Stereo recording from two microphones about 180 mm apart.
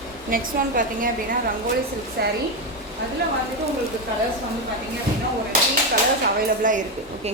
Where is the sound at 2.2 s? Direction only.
60° right (ahead or behind).